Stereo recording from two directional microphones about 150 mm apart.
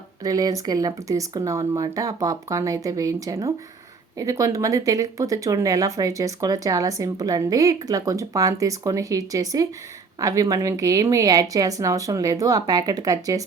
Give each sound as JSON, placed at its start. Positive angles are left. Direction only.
{"t": 0.3, "sound": "speech", "side_deg": -25}